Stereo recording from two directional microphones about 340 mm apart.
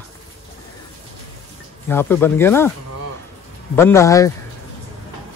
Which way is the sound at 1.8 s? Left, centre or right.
Centre.